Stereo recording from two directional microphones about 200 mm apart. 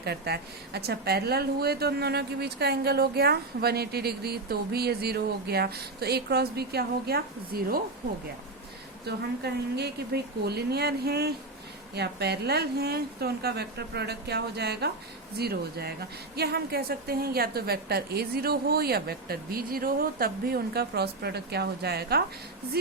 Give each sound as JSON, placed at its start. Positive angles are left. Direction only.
{"t": 0.0, "sound": "speech", "side_deg": -55}
{"t": 9.0, "sound": "a woman's voice", "side_deg": -55}